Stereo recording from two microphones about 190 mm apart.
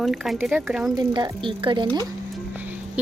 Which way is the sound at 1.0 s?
25° right (ahead or behind).